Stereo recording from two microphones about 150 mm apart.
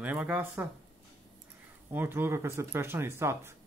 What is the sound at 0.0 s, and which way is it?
Speech, 10° right (ahead or behind).